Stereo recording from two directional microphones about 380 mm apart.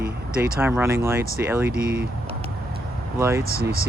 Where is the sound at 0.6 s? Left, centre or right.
Centre.